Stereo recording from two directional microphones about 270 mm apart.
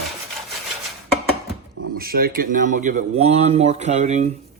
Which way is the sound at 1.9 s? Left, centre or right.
Right.